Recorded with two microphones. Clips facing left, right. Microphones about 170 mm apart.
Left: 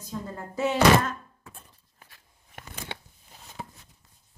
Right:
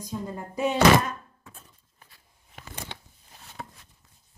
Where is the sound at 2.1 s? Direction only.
60° left (ahead or behind).